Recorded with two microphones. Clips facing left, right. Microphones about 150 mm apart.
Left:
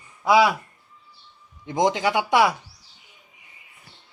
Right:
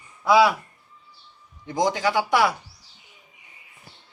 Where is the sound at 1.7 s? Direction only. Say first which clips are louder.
Left 1 dB; 20° left (ahead or behind).